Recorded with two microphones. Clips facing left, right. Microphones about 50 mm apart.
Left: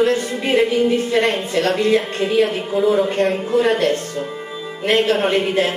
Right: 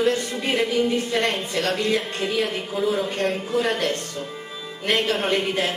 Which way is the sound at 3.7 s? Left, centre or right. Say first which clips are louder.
Left 7 dB; left.